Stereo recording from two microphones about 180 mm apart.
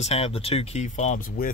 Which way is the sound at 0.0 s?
35° left (ahead or behind).